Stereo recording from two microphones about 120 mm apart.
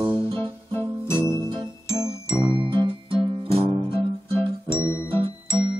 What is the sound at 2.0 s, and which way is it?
Music, 35° right (ahead or behind).